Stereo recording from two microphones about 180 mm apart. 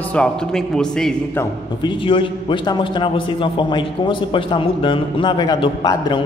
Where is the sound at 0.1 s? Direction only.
5° left (ahead or behind).